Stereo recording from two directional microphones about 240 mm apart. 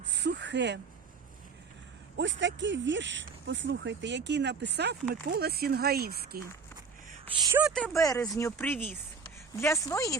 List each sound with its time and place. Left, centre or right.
0.1 s a sound: right
2.1 s speech: right
7.3 s speech: centre
7.6 s speech: centre
7.9 s speech: centre